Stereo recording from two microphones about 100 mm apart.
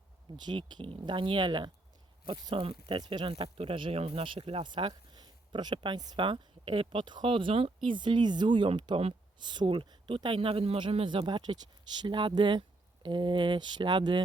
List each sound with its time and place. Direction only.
0.3 s speech: 50° right (ahead or behind); by 7.7 s 65° right (ahead or behind)
7.9 s speech: 50° right (ahead or behind); by 10.8 s 75° right (ahead or behind)
10.9 s speech: 60° right (ahead or behind)